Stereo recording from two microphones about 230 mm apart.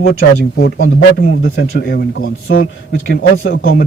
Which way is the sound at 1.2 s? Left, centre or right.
Left.